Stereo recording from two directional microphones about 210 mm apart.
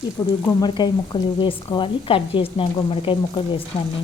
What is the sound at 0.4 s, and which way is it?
Speech, 20° left (ahead or behind).